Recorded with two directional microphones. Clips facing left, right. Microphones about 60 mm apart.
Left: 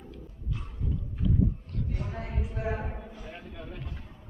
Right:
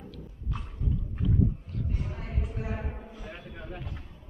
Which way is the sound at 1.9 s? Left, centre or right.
Left.